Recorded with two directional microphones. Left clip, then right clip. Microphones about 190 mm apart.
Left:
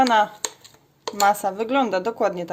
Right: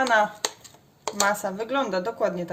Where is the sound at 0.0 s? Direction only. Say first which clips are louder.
Left 3 dB; 30° left (ahead or behind).